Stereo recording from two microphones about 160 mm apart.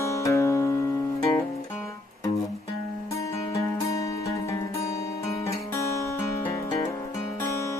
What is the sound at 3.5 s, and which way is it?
Music, 20° left (ahead or behind).